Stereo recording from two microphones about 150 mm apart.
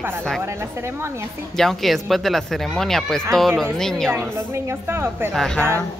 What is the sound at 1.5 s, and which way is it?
Speech, centre (ahead or behind).